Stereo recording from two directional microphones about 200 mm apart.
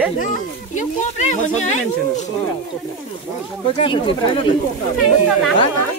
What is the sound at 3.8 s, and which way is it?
Speech, 25° left (ahead or behind).